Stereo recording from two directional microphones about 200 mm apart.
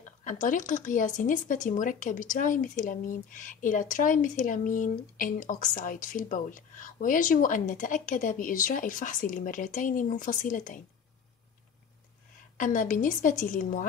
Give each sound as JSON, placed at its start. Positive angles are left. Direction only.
{"t": 0.0, "sound": "speech", "side_deg": 40}
{"t": 12.5, "sound": "speech", "side_deg": 40}